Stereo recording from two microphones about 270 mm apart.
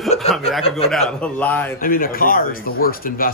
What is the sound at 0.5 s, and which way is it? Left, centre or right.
Speech, centre.